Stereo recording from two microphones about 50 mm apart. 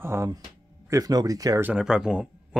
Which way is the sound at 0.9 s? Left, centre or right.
Right.